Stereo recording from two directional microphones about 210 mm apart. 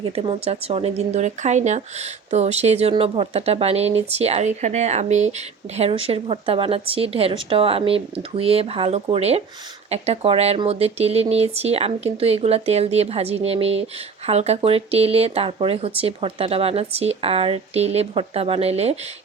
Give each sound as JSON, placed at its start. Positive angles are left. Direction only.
{"t": 0.0, "sound": "speech", "side_deg": -25}